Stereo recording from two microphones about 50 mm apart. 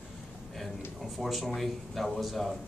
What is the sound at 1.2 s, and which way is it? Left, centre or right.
Speech, centre.